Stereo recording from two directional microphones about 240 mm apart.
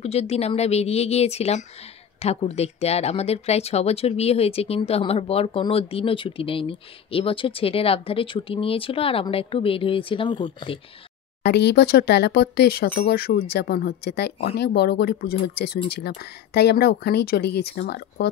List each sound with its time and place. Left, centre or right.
0.0 s speech: left
11.4 s speech: left